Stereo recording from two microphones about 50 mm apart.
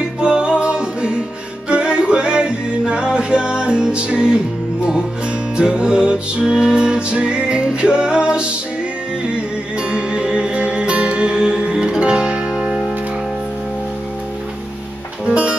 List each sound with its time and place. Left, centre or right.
0.2 s music: centre
5.6 s music: centre
9.8 s music: centre
15.2 s music: right